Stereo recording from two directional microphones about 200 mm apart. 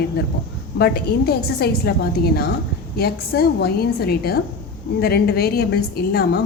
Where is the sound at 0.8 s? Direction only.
55° left (ahead or behind).